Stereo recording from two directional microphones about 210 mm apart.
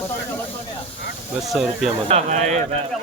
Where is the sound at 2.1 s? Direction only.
35° right (ahead or behind).